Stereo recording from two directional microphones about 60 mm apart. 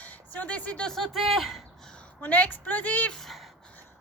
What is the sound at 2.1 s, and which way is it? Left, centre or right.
Speech, left.